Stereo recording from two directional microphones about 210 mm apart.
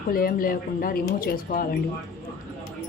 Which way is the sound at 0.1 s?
45° left (ahead or behind).